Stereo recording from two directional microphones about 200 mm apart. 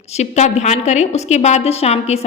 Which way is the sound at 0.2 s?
35° left (ahead or behind).